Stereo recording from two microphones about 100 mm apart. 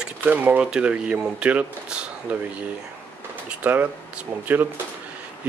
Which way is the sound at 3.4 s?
15° right (ahead or behind).